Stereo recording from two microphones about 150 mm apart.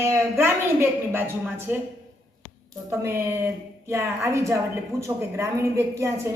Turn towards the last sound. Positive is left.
turn(degrees=-20)  # may be behind; listen again after turning